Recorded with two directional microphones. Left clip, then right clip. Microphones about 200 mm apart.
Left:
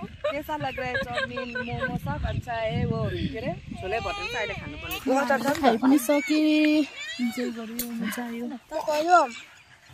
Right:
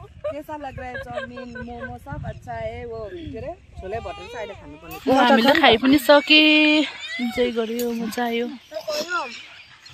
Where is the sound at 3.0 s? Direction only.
25° left (ahead or behind).